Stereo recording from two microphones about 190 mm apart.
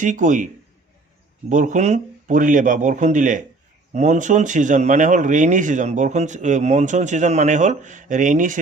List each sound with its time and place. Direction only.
0.0 s speech: 40° right (ahead or behind)
1.5 s speech: 40° right (ahead or behind)